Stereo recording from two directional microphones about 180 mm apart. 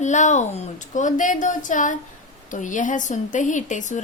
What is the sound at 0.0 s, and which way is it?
A woman's voice, 40° left (ahead or behind).